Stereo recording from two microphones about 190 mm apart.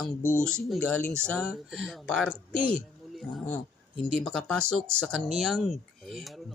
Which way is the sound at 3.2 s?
Centre (ahead or behind).